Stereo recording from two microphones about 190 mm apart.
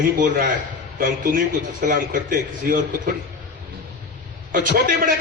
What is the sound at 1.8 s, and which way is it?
Speech, 45° right (ahead or behind).